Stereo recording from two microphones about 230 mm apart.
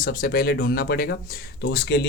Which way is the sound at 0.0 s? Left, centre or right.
Left.